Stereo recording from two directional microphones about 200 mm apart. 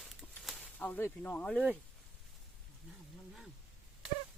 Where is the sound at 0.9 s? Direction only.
10° left (ahead or behind).